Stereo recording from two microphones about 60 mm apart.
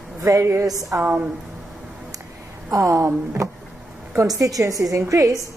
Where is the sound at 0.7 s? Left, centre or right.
Right.